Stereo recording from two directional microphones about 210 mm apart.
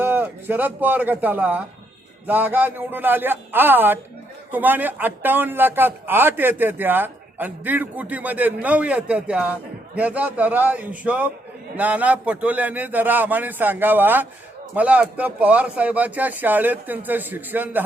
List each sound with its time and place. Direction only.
0.0 s a man's voice: 10° right (ahead or behind)